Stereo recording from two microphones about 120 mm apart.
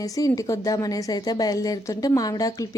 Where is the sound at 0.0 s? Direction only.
30° left (ahead or behind).